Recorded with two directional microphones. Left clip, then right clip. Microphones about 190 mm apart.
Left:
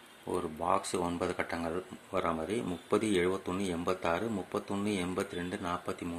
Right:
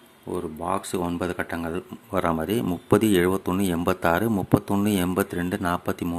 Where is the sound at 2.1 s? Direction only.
25° right (ahead or behind).